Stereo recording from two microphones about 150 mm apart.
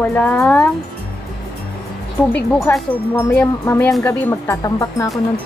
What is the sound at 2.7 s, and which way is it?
A woman's voice, 20° left (ahead or behind).